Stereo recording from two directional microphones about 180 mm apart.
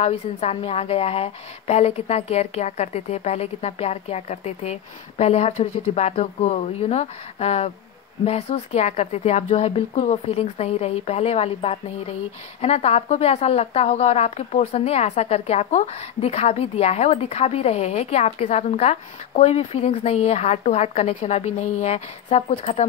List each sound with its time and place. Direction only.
0.0 s a woman's voice: 35° left (ahead or behind)